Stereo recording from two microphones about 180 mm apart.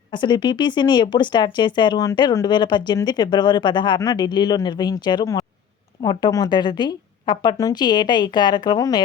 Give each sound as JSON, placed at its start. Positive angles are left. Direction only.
{"t": 0.1, "sound": "speech", "side_deg": 25}